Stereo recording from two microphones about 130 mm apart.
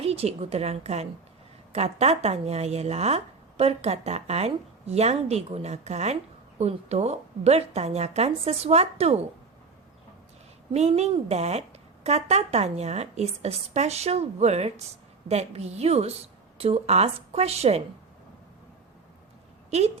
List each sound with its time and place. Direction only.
0.0 s a woman's voice: 50° right (ahead or behind)
10.8 s a woman's voice: 55° right (ahead or behind)
19.7 s a woman's voice: 55° right (ahead or behind)